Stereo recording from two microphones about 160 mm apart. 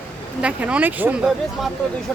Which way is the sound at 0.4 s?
10° right (ahead or behind).